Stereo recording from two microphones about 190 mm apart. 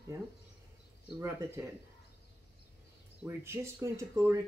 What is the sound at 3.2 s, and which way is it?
Speech, 10° right (ahead or behind).